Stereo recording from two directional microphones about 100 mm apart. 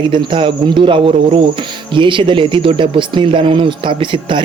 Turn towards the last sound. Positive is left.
turn(degrees=-55)  # may be behind; listen again after turning